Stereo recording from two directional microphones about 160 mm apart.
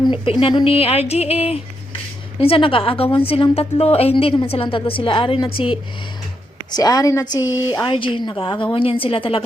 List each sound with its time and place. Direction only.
0.1 s a woman's voice: 35° left (ahead or behind)
6.7 s a woman's voice: 25° left (ahead or behind)